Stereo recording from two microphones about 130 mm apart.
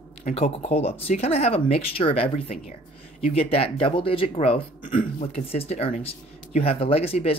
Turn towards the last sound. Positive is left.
turn(degrees=50)  # may be behind; listen again after turning